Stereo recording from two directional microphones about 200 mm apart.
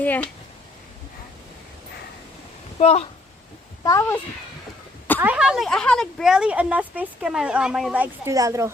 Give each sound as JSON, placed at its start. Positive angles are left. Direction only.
{"t": 0.0, "sound": "a child's voice", "side_deg": 10}
{"t": 2.7, "sound": "speech", "side_deg": 30}
{"t": 3.8, "sound": "a child's voice", "side_deg": 15}
{"t": 5.2, "sound": "speech", "side_deg": -5}